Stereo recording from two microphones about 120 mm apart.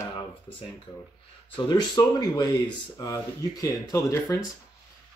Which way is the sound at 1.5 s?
40° left (ahead or behind).